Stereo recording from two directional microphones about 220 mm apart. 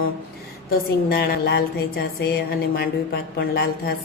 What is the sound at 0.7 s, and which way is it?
A woman's voice, 45° left (ahead or behind).